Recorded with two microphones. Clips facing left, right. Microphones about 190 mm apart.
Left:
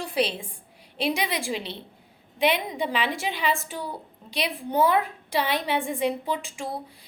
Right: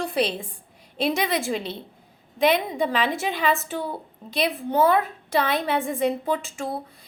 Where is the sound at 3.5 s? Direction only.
10° left (ahead or behind).